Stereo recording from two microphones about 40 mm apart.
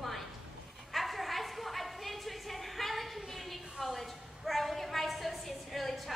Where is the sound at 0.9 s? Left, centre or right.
Centre.